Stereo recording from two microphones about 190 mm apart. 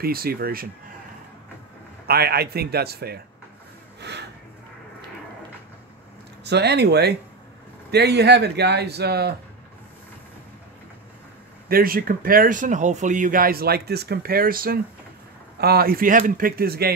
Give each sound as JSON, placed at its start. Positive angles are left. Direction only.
{"t": 0.0, "sound": "speech", "side_deg": -50}
{"t": 2.0, "sound": "speech", "side_deg": -55}
{"t": 4.0, "sound": "a sound", "side_deg": -65}
{"t": 6.4, "sound": "speech", "side_deg": -60}
{"t": 11.7, "sound": "speech", "side_deg": -50}